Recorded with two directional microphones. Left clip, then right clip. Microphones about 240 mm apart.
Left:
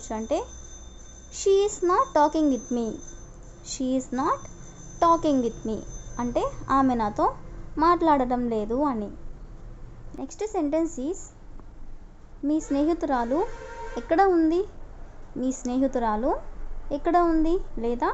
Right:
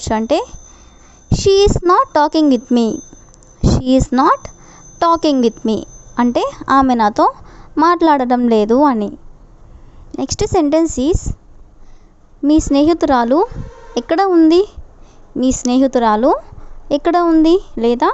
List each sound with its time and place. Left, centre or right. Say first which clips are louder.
0.0 s a woman's voice: right 12 dB; right
10.2 s a woman's voice: right 14 dB; right
12.5 s a woman's voice: right 13 dB; right